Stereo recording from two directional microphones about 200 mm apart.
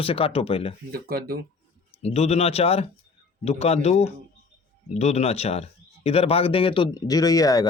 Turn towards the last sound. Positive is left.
turn(degrees=15)  # may be behind; listen again after turning